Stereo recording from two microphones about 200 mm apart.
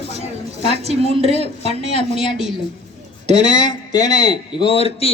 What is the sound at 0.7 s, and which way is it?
Speech, 30° right (ahead or behind).